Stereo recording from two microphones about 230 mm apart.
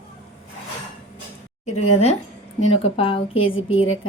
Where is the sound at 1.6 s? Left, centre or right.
Left.